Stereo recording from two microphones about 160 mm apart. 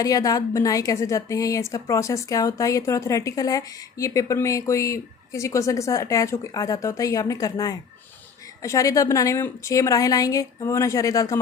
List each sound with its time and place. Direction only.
0.0 s a woman's voice: 20° left (ahead or behind)